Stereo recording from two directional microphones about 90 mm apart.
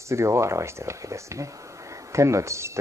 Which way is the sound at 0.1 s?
30° right (ahead or behind).